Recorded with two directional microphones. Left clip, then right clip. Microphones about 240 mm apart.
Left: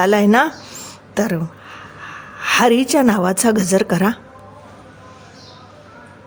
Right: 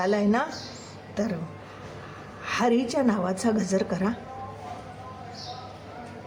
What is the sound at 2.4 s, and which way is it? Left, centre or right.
Speech, left.